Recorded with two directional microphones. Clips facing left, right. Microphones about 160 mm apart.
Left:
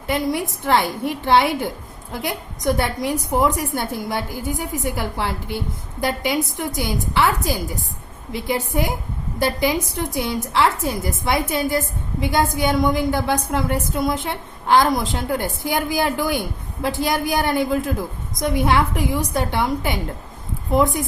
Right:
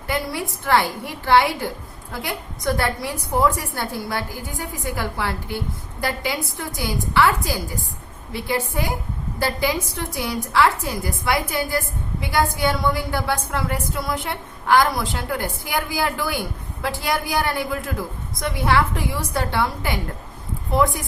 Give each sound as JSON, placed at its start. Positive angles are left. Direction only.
{"t": 0.1, "sound": "a woman's voice", "side_deg": 20}